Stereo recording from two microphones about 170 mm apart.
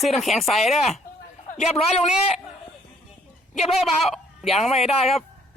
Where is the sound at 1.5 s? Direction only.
40° left (ahead or behind).